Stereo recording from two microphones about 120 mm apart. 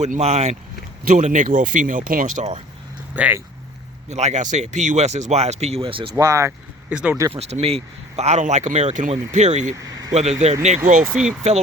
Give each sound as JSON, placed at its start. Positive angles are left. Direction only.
{"t": 0.0, "sound": "speech", "side_deg": -70}
{"t": 1.1, "sound": "speech", "side_deg": -90}
{"t": 3.2, "sound": "speech", "side_deg": -15}
{"t": 4.1, "sound": "speech", "side_deg": -70}
{"t": 6.1, "sound": "speech", "side_deg": -25}
{"t": 6.9, "sound": "speech", "side_deg": -10}
{"t": 7.3, "sound": "speech", "side_deg": -60}
{"t": 9.7, "sound": "speech", "side_deg": -30}
{"t": 10.2, "sound": "speech", "side_deg": -70}
{"t": 11.0, "sound": "speech", "side_deg": -5}